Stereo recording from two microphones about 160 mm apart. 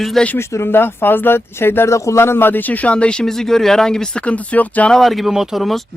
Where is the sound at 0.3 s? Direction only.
15° left (ahead or behind).